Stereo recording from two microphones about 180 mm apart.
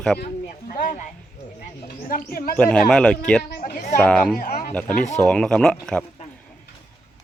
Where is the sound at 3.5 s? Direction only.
55° left (ahead or behind).